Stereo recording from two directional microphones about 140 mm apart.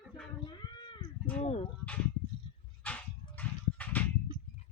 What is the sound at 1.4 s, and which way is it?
Speech, 50° left (ahead or behind).